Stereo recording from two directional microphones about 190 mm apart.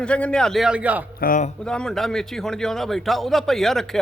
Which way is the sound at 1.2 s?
40° left (ahead or behind).